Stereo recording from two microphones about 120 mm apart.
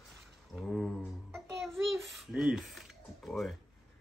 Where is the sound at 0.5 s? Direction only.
Centre (ahead or behind).